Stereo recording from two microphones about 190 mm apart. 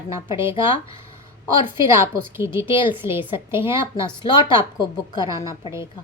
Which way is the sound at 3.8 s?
25° left (ahead or behind).